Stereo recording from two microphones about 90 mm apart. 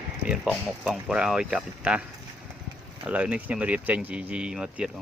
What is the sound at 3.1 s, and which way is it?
Speech, 15° right (ahead or behind).